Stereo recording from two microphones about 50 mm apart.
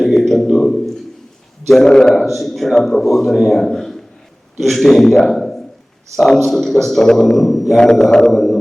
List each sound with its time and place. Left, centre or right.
0.0 s a sound: centre
1.6 s a man's voice: centre
2.2 s a man's voice: centre
7.8 s a man's voice: centre
8.3 s music: centre